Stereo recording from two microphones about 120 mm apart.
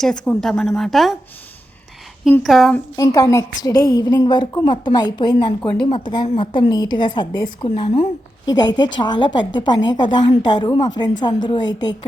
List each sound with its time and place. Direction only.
0.0 s speech: 5° left (ahead or behind)
2.4 s speech: centre (ahead or behind)
2.9 s a woman's voice: 30° left (ahead or behind)